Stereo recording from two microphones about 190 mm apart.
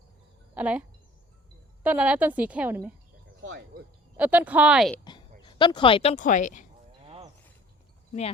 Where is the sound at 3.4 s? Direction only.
65° right (ahead or behind).